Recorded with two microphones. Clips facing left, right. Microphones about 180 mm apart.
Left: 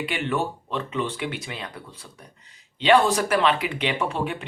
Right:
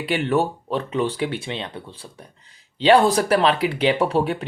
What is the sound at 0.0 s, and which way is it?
Speech, 35° right (ahead or behind).